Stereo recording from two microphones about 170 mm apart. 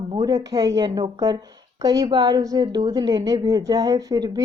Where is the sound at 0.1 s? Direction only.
20° right (ahead or behind).